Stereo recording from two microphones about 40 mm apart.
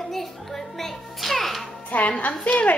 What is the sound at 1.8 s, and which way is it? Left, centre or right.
Speech, left.